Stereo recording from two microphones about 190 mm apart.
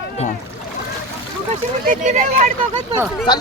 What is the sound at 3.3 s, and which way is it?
Speech, 20° left (ahead or behind).